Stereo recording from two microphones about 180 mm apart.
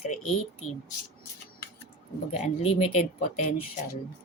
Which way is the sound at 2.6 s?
35° left (ahead or behind).